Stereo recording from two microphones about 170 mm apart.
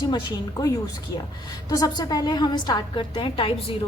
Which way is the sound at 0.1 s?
25° left (ahead or behind).